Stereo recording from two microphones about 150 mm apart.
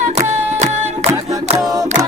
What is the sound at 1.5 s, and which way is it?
A capella, 25° right (ahead or behind).